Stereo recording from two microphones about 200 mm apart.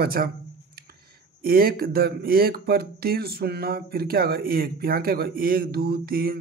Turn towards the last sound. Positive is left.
turn(degrees=-50)  # may be behind; listen again after turning